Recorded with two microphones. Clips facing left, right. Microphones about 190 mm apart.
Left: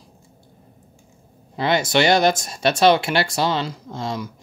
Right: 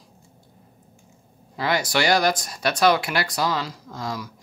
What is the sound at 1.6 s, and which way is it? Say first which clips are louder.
Speech: left 4 dB; 25° left (ahead or behind).